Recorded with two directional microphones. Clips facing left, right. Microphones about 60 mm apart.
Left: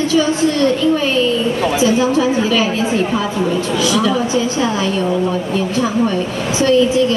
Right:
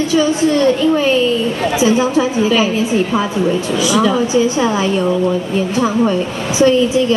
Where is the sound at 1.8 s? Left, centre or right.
Centre.